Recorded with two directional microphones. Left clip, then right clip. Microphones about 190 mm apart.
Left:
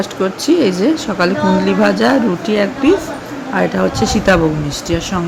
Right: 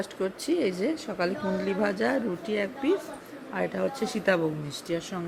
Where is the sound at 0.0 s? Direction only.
5° right (ahead or behind).